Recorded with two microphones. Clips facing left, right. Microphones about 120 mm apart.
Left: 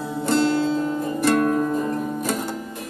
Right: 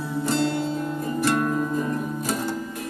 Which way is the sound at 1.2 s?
55° left (ahead or behind).